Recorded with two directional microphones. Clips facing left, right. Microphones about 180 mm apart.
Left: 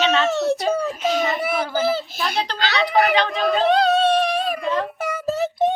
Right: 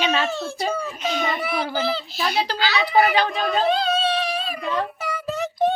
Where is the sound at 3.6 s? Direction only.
70° left (ahead or behind); by 4.5 s 50° left (ahead or behind).